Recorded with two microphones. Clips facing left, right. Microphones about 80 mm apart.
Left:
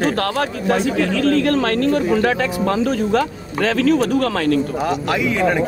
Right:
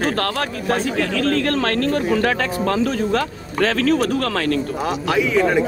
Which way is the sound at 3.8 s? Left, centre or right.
Right.